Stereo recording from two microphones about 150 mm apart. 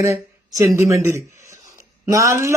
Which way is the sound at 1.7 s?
20° right (ahead or behind).